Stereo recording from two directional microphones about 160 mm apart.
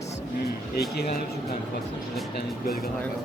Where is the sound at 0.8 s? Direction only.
75° left (ahead or behind).